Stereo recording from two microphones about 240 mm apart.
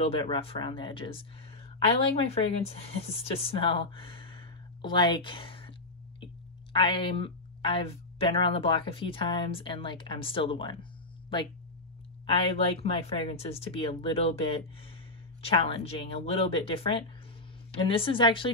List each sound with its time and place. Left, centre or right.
0.0 s a woman's voice: left